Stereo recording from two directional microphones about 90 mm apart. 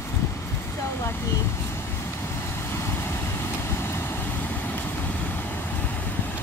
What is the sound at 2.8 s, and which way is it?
Vehicle, 25° left (ahead or behind).